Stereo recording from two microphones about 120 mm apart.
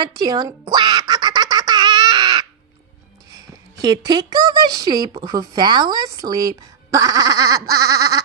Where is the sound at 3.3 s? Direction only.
30° right (ahead or behind).